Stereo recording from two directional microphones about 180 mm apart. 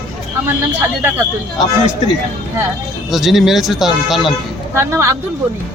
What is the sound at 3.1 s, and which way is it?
Speech, centre (ahead or behind).